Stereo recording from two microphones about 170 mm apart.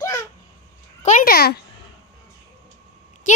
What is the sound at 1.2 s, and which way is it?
Speech, 60° left (ahead or behind).